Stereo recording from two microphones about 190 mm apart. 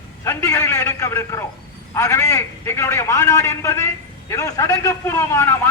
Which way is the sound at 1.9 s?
15° left (ahead or behind).